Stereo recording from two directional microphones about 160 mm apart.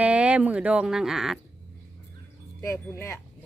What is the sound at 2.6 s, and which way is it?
Speech, 15° left (ahead or behind).